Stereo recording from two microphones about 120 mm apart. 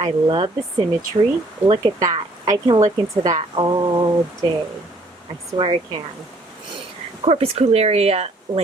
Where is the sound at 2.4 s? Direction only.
35° right (ahead or behind).